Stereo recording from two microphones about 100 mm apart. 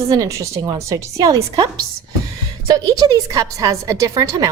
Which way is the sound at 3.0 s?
35° right (ahead or behind).